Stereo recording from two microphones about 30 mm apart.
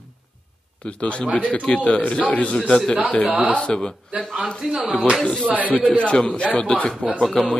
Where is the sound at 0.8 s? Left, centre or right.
Left.